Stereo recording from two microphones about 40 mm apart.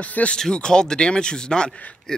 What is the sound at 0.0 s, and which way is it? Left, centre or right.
Speech, left.